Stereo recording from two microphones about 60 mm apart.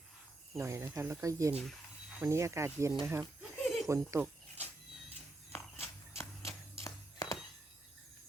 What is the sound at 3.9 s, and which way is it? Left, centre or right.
Speech, right.